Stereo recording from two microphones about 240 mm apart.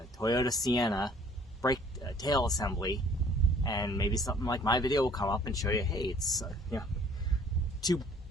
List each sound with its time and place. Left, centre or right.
0.2 s speech: centre
6.2 s speech: centre
7.8 s speech: centre